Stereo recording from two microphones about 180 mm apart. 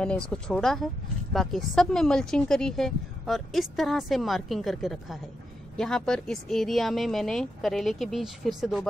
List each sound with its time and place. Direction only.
0.0 s speech: 5° left (ahead or behind)